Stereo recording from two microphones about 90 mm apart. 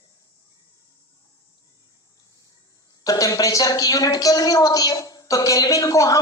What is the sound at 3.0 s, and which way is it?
Speech, 45° left (ahead or behind).